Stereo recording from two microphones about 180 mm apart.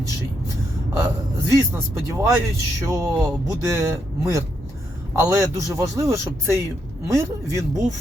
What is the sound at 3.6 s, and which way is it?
Speech, 15° right (ahead or behind).